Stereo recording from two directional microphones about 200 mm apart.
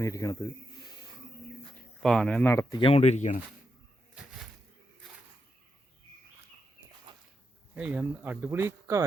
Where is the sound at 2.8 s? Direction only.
30° left (ahead or behind).